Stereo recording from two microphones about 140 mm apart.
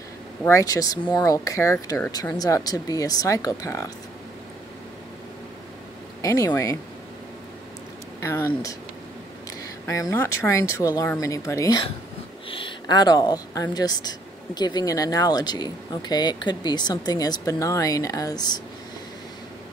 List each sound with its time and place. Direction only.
0.5 s speech: 25° left (ahead or behind)
6.2 s speech: 25° left (ahead or behind)
8.2 s speech: 20° left (ahead or behind)
9.8 s speech: 25° left (ahead or behind)
12.4 s speech: 35° left (ahead or behind)